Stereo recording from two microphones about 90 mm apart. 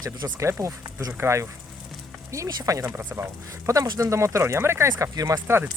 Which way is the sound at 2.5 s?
45° right (ahead or behind).